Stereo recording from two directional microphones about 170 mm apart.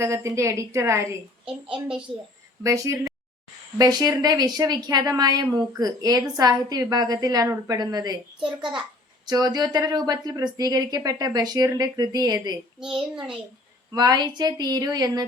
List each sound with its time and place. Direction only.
0.0 s a woman's voice: 15° right (ahead or behind)
2.6 s a woman's voice: 20° right (ahead or behind)
9.2 s a woman's voice: 25° right (ahead or behind)